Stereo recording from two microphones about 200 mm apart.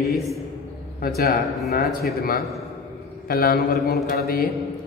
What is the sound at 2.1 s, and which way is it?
A woman's voice, 50° left (ahead or behind).